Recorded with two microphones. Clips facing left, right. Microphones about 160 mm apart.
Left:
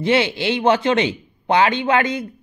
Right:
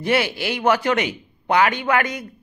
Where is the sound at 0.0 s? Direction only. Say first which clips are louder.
Left 3 dB; 25° left (ahead or behind).